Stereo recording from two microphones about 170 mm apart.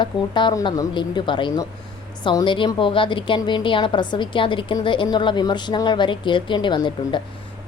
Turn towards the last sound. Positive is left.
turn(degrees=25)  # may be behind; listen again after turning